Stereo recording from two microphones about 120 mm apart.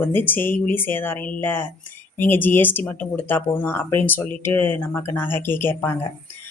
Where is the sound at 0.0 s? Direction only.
15° left (ahead or behind).